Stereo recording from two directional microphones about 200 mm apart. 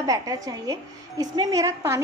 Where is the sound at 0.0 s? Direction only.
15° right (ahead or behind).